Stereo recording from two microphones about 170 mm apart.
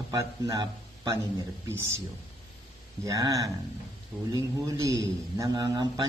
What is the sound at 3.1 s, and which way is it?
A man's voice, 20° right (ahead or behind).